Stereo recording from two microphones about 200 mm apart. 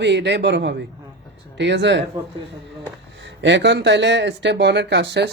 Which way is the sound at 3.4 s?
60° right (ahead or behind).